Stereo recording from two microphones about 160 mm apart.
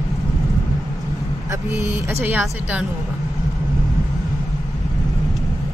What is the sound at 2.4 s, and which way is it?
Speech, 5° right (ahead or behind).